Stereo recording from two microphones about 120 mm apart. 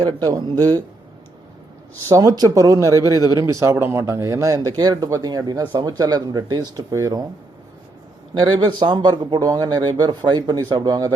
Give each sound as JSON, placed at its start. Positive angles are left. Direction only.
{"t": 0.2, "sound": "speech", "side_deg": -30}
{"t": 2.0, "sound": "speech", "side_deg": -30}
{"t": 8.4, "sound": "speech", "side_deg": -40}